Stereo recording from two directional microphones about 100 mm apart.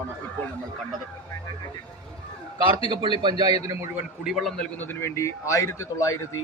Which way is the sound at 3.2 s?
45° right (ahead or behind).